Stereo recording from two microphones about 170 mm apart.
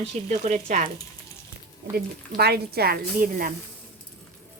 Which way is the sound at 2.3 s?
70° right (ahead or behind).